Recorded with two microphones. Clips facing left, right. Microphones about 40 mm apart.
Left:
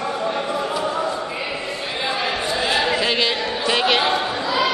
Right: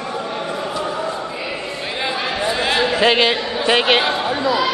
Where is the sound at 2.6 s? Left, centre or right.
Right.